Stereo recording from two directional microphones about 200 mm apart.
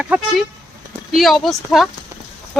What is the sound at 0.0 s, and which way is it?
Speech, 5° right (ahead or behind).